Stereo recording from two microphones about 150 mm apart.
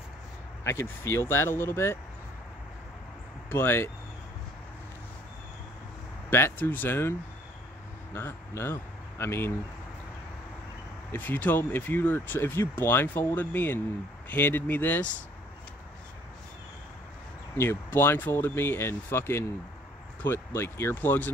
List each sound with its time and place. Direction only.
0.7 s speech: 20° left (ahead or behind)
3.4 s speech: 15° left (ahead or behind)
6.3 s speech: 15° left (ahead or behind)
11.1 s speech: 10° left (ahead or behind)
17.6 s speech: 15° left (ahead or behind)